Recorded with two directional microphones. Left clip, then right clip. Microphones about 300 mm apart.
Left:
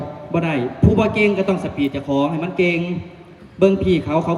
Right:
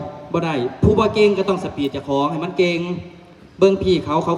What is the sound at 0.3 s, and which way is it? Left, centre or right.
A man's voice, centre.